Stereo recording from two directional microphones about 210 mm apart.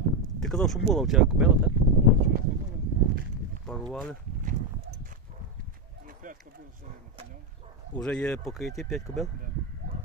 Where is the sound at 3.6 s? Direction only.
5° left (ahead or behind).